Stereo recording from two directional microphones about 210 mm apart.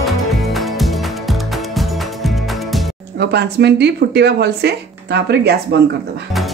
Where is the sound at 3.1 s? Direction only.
50° right (ahead or behind).